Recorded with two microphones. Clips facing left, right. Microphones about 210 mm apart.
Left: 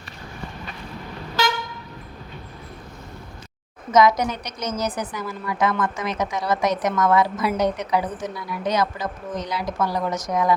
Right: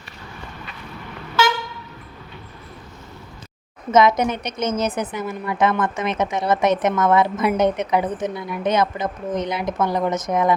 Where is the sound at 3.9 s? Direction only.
25° right (ahead or behind).